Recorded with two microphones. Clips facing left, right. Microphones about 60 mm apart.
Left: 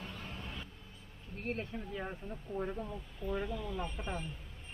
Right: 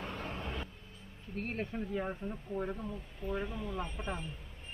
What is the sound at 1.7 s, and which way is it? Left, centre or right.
Speech, centre.